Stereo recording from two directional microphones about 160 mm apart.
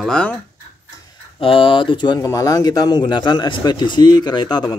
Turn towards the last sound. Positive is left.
turn(degrees=25)  # may be behind; listen again after turning